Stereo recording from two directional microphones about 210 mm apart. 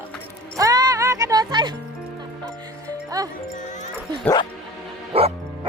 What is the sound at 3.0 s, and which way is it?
Music, 15° right (ahead or behind).